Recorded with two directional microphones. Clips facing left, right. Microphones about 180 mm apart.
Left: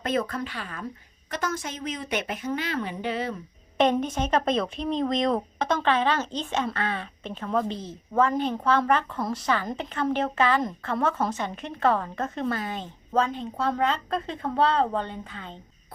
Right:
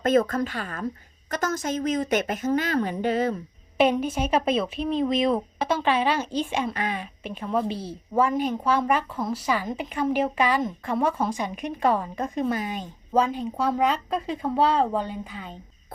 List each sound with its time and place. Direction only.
0.0 s a woman's voice: 45° right (ahead or behind)
4.0 s a woman's voice: 10° right (ahead or behind)